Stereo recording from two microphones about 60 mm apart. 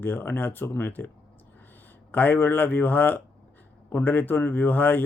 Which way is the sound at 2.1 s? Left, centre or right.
Left.